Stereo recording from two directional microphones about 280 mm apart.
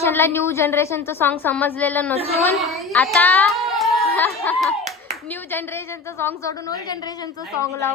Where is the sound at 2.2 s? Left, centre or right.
Right.